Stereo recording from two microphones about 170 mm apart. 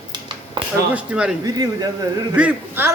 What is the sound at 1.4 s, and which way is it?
Speech, 20° right (ahead or behind).